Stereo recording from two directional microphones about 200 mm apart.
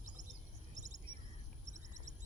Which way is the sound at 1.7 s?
35° right (ahead or behind).